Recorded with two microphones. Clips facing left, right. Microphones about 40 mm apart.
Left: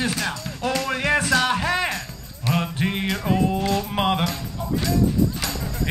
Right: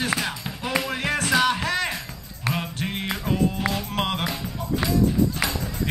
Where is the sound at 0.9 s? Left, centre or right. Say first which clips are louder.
Left 6 dB; centre.